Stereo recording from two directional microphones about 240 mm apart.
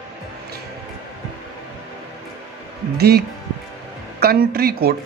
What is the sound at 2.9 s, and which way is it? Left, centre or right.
Speech, right.